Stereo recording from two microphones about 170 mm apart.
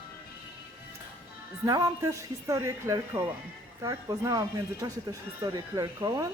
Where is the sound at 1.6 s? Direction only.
20° right (ahead or behind).